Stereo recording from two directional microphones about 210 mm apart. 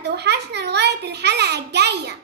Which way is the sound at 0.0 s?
50° right (ahead or behind).